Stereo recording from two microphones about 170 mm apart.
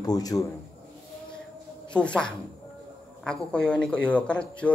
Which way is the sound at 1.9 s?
5° left (ahead or behind).